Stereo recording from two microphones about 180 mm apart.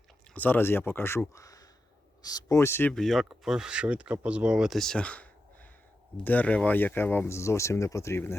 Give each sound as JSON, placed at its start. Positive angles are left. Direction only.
{"t": 0.3, "sound": "speech", "side_deg": 10}
{"t": 2.9, "sound": "speech", "side_deg": 0}